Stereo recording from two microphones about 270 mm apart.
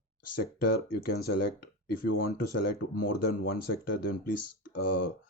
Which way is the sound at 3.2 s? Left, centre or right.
Left.